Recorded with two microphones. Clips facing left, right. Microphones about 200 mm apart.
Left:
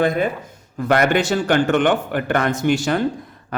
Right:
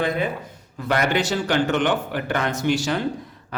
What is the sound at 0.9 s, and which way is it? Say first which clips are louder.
Speech: left 4 dB; 55° left (ahead or behind).